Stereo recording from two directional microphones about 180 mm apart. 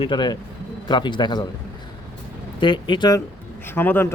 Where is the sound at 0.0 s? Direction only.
25° left (ahead or behind).